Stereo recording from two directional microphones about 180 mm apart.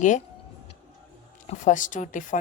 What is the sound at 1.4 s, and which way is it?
Speech, 45° left (ahead or behind).